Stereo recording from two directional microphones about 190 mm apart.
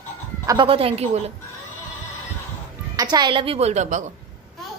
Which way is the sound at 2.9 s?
20° right (ahead or behind).